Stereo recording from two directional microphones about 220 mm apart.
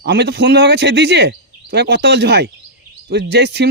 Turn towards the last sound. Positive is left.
turn(degrees=-50)  # may be behind; listen again after turning